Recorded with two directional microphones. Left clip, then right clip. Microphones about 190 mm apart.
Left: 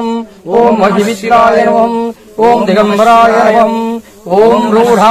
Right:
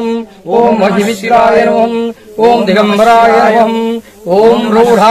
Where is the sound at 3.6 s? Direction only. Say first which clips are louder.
Even; 30° right (ahead or behind).